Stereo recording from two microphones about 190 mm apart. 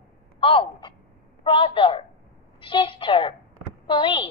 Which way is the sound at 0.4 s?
25° left (ahead or behind).